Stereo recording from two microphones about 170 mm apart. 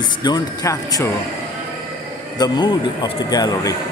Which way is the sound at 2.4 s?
25° left (ahead or behind).